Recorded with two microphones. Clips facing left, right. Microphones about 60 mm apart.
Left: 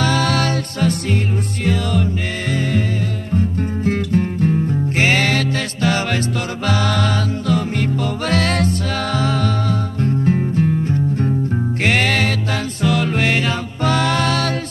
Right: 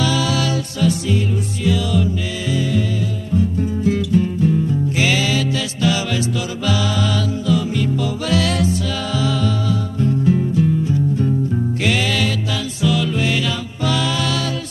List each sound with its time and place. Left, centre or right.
0.0 s music: left
3.3 s music: left